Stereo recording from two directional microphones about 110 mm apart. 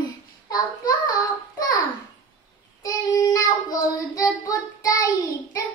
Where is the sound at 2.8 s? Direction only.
30° left (ahead or behind).